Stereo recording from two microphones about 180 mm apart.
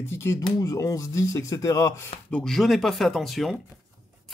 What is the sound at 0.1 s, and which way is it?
Speech, 15° left (ahead or behind).